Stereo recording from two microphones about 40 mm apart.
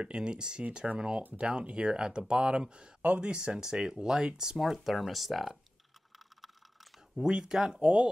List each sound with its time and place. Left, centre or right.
0.0 s speech: right
4.6 s speech: centre
6.1 s a sound: centre
7.2 s speech: centre